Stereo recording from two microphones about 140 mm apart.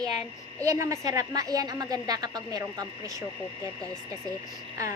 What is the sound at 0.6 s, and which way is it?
A woman's voice, 20° right (ahead or behind).